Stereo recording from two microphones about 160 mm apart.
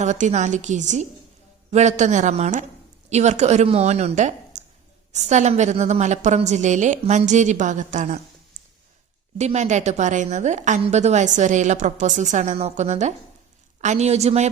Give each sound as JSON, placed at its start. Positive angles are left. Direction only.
{"t": 0.0, "sound": "a woman's voice", "side_deg": -45}
{"t": 9.4, "sound": "a woman's voice", "side_deg": -45}